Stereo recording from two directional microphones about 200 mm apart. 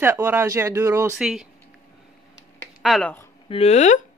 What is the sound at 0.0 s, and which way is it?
Speech, 10° right (ahead or behind).